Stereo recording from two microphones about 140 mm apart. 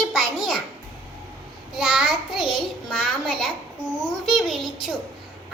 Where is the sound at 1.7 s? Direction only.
5° right (ahead or behind).